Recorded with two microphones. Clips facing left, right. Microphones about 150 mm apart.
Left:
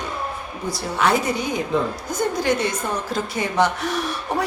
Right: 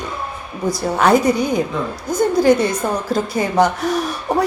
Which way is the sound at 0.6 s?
45° right (ahead or behind).